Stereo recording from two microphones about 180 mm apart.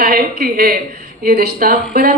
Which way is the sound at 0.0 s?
55° right (ahead or behind).